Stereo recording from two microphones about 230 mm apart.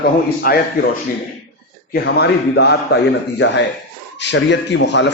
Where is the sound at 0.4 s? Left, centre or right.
Left.